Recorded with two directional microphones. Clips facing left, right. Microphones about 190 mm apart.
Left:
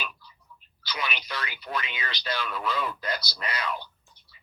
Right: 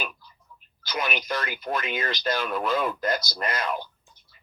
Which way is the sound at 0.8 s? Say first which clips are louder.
Right 5 dB; 50° right (ahead or behind).